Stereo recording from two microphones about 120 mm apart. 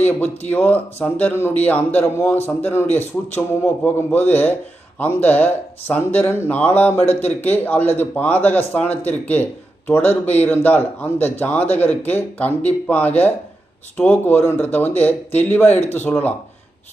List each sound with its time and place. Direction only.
0.2 s a man's voice: 15° left (ahead or behind)